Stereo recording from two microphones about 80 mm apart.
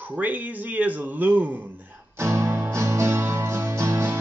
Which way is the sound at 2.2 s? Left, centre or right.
Right.